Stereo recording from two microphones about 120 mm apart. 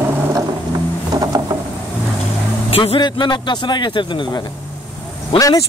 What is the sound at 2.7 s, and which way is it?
Speech, 55° left (ahead or behind).